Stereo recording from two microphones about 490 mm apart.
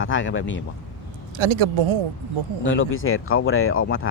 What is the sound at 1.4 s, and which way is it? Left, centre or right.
Speech, right.